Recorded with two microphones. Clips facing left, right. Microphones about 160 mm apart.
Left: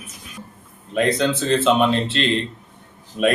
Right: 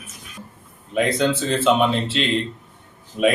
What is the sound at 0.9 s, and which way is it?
Speech, 5° right (ahead or behind).